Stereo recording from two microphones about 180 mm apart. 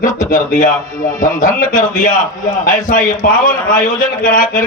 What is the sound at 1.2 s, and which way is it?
A man's voice, 50° left (ahead or behind).